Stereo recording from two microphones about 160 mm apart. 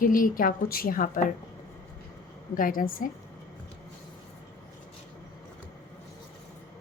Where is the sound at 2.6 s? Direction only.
60° left (ahead or behind).